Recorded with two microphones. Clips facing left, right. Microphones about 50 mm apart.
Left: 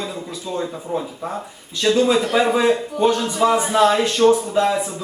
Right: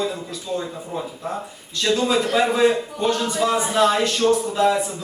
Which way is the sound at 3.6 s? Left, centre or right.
Centre.